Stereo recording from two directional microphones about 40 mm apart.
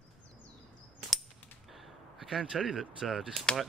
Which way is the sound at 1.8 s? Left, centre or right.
Centre.